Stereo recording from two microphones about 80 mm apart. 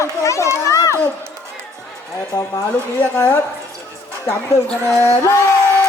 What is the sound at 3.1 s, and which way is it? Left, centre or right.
Speech, left.